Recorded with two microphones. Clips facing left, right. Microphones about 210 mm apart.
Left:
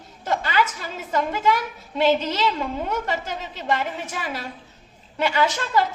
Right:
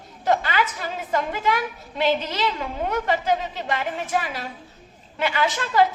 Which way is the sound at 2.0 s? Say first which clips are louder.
Left 3 dB; 50° left (ahead or behind).